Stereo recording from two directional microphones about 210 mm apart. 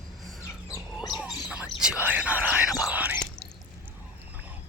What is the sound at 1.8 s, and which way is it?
Whispering, 5° right (ahead or behind).